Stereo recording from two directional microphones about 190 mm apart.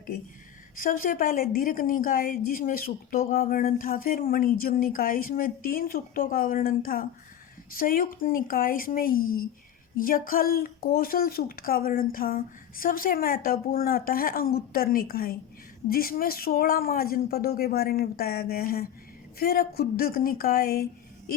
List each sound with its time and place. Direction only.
0.8 s a woman's voice: 50° left (ahead or behind)